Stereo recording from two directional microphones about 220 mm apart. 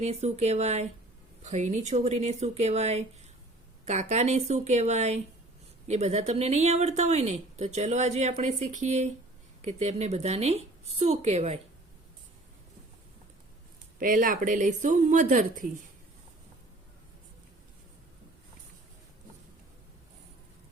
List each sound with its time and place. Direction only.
0.0 s speech: 30° right (ahead or behind)
14.0 s speech: 40° right (ahead or behind)